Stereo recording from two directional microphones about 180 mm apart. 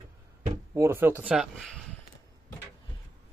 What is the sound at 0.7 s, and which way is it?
Speech, 15° right (ahead or behind).